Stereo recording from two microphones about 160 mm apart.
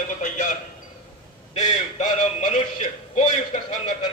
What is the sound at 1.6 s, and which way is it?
A man's voice, 45° left (ahead or behind).